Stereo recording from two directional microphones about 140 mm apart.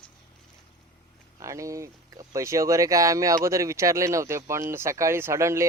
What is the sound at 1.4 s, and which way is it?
Speech, 20° right (ahead or behind).